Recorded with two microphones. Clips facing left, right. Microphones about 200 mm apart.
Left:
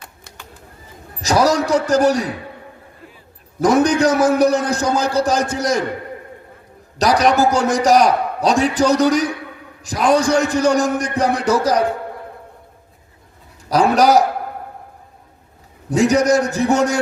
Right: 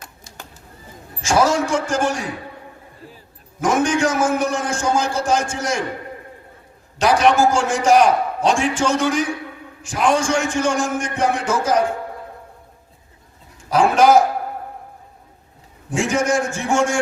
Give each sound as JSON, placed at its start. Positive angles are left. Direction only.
{"t": 0.3, "sound": "bird", "side_deg": 60}
{"t": 1.2, "sound": "a man's voice", "side_deg": 40}
{"t": 3.6, "sound": "a man's voice", "side_deg": 35}
{"t": 7.0, "sound": "a man's voice", "side_deg": 35}
{"t": 13.7, "sound": "a man's voice", "side_deg": 40}
{"t": 15.9, "sound": "a man's voice", "side_deg": 40}